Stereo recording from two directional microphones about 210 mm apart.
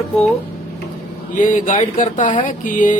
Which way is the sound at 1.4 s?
35° left (ahead or behind).